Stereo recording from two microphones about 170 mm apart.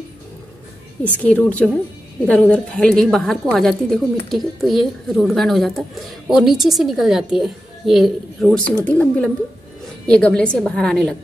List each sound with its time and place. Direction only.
1.2 s a woman's voice: 10° left (ahead or behind)